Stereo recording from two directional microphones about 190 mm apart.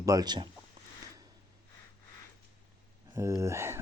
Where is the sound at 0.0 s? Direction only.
20° right (ahead or behind).